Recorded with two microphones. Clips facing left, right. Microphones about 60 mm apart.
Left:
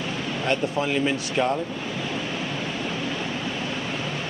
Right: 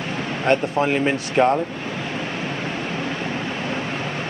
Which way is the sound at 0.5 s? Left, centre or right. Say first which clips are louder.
Right 6 dB; right.